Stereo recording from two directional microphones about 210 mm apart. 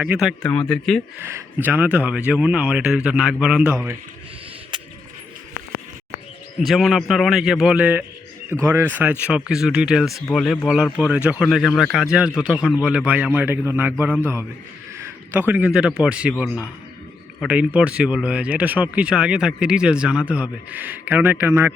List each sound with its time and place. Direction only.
0.0 s speech: 5° right (ahead or behind)
1.2 s speech: 10° right (ahead or behind)
4.7 s a sound: 20° right (ahead or behind)
6.7 s speech: centre (ahead or behind)
10.1 s speech: 15° left (ahead or behind)
10.3 s speech: centre (ahead or behind)
14.9 s a sound: 10° right (ahead or behind)
16.0 s speech: 5° right (ahead or behind)